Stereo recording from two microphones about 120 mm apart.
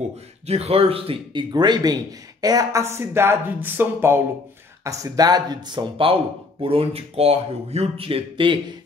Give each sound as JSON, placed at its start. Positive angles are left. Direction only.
{"t": 0.5, "sound": "speech", "side_deg": -60}
{"t": 1.5, "sound": "speech", "side_deg": -35}
{"t": 4.8, "sound": "speech", "side_deg": -30}